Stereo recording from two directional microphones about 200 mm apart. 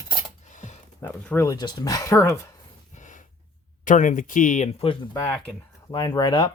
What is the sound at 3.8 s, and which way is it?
Speech, 40° left (ahead or behind).